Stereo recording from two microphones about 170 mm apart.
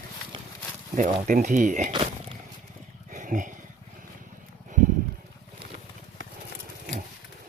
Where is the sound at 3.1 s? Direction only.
50° right (ahead or behind).